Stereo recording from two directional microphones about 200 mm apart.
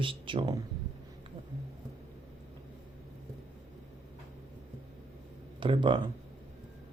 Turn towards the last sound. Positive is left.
turn(degrees=-25)  # may be behind; listen again after turning